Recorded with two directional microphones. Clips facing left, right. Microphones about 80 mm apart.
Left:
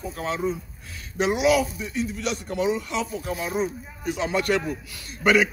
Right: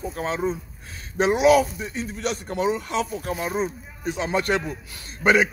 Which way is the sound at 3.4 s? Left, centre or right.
Right.